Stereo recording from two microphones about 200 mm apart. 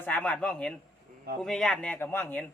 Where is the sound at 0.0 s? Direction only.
10° left (ahead or behind).